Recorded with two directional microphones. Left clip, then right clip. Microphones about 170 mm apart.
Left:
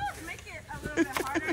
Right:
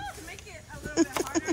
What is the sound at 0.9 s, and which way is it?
Speech, 25° right (ahead or behind).